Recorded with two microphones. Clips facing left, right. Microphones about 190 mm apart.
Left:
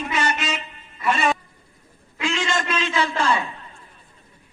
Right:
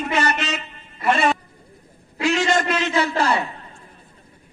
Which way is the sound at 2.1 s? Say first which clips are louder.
Right 5 dB; 40° right (ahead or behind).